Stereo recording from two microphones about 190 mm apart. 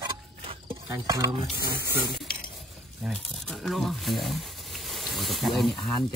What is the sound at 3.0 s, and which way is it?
Crumpling, centre (ahead or behind).